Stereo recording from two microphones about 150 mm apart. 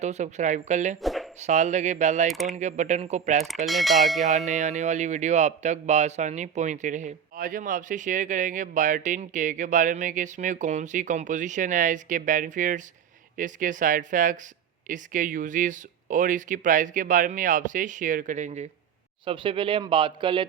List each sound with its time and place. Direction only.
0.0 s a woman's voice: 50° right (ahead or behind)
1.0 s a sound: centre (ahead or behind)
1.4 s a woman's voice: 50° right (ahead or behind)
2.3 s speech: centre (ahead or behind)
2.6 s a woman's voice: 50° right (ahead or behind)
3.7 s speech: centre (ahead or behind)
4.2 s speech: 50° right (ahead or behind)
19.2 s speech: 35° right (ahead or behind)